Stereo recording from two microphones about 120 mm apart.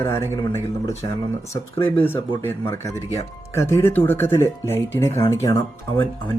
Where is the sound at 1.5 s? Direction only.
50° left (ahead or behind).